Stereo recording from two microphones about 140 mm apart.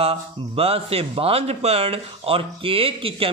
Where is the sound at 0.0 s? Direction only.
45° right (ahead or behind).